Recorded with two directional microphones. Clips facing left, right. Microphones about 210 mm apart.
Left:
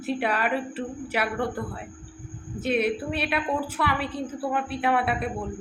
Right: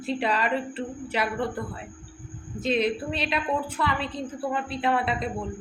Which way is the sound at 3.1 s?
65° left (ahead or behind).